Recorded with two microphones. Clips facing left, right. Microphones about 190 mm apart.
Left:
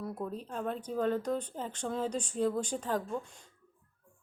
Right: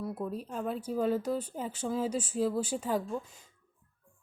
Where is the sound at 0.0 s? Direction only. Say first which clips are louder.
Right 2 dB; 5° right (ahead or behind).